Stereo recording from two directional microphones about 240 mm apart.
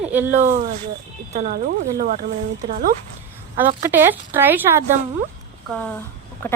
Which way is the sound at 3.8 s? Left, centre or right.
Centre.